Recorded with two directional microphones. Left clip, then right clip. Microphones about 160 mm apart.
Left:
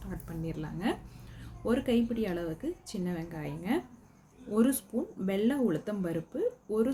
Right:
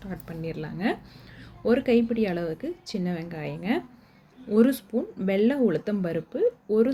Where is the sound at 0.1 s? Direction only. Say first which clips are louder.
Right 5 dB; 20° right (ahead or behind).